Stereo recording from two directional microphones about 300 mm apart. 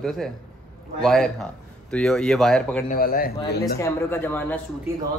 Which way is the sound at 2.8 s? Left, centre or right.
Left.